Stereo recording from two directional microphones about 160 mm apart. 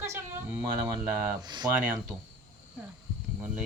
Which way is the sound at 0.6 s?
30° right (ahead or behind).